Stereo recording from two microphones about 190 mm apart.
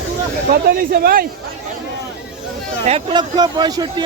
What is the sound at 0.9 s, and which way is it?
Speech, 50° right (ahead or behind).